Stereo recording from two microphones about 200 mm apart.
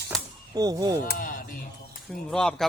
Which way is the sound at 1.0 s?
45° left (ahead or behind).